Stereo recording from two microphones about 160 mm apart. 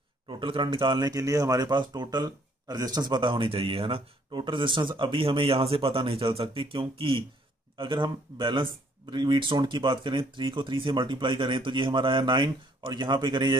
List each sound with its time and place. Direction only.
0.3 s speech: 30° right (ahead or behind)